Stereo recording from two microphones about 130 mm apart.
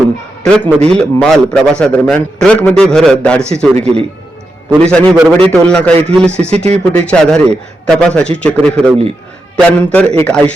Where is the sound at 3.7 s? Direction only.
55° right (ahead or behind).